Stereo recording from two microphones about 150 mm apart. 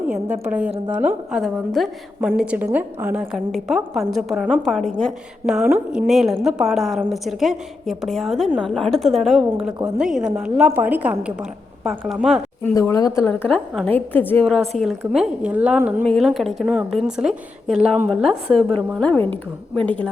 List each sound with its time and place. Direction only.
0.4 s a woman's voice: 10° right (ahead or behind)
12.8 s speech: 20° left (ahead or behind)
13.2 s a woman's voice: 10° left (ahead or behind)
14.4 s a woman's voice: centre (ahead or behind)
18.3 s a woman's voice: 40° right (ahead or behind)
18.9 s a woman's voice: 10° left (ahead or behind)